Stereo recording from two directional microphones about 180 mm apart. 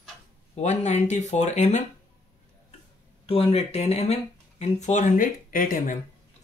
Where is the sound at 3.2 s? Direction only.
35° left (ahead or behind); by 5.9 s 50° left (ahead or behind).